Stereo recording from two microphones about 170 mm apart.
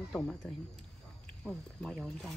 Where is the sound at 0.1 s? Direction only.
5° left (ahead or behind).